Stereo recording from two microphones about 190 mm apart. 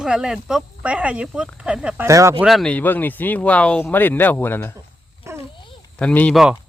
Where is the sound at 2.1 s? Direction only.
15° right (ahead or behind).